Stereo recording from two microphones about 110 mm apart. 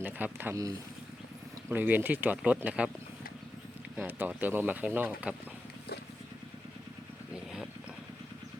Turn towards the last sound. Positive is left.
turn(degrees=-5)  # may be behind; listen again after turning